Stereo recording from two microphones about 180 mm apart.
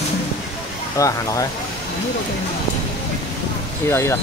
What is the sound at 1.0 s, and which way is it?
Speech, 20° left (ahead or behind).